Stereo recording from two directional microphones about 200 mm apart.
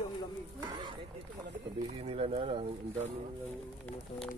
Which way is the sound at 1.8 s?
30° right (ahead or behind).